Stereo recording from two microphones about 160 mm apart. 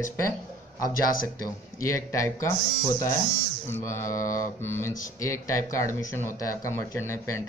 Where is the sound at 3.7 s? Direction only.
15° left (ahead or behind).